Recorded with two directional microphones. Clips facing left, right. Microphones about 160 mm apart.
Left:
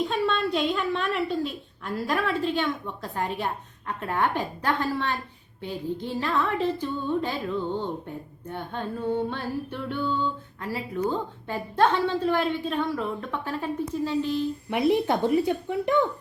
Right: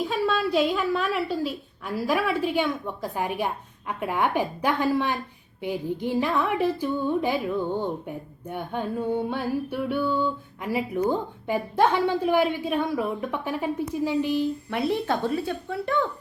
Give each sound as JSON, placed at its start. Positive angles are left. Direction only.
{"t": 0.0, "sound": "music", "side_deg": -5}
{"t": 14.7, "sound": "speech", "side_deg": 15}